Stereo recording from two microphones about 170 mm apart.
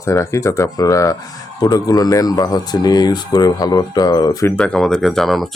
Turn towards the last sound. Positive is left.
turn(degrees=0)  # may be behind; listen again after turning